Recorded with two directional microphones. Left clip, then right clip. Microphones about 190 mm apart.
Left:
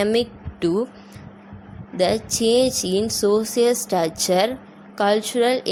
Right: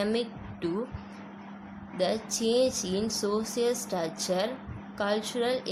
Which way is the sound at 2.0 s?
35° left (ahead or behind).